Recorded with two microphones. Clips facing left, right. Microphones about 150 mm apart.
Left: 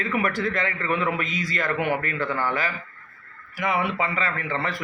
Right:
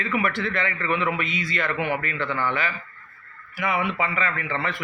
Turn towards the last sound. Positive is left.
turn(degrees=40)  # may be behind; listen again after turning